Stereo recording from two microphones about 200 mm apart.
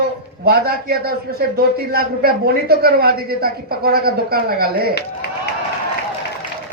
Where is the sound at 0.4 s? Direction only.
50° right (ahead or behind).